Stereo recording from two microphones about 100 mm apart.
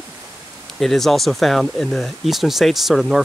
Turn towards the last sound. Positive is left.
turn(degrees=0)  # may be behind; listen again after turning